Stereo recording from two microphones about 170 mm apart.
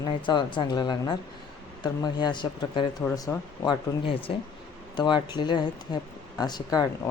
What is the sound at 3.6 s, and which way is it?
Speech, 30° left (ahead or behind).